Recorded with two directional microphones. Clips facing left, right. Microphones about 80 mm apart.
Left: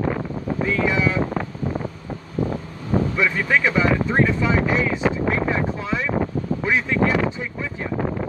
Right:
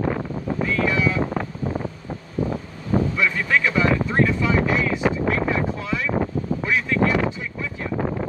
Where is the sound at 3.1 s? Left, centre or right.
Left.